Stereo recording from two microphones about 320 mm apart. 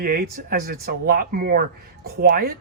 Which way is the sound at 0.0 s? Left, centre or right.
Right.